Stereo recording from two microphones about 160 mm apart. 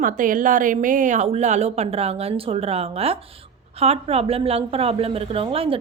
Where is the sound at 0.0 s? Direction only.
55° right (ahead or behind).